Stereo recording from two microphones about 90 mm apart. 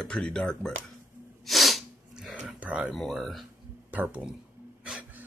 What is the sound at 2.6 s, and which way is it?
Speech, 10° right (ahead or behind).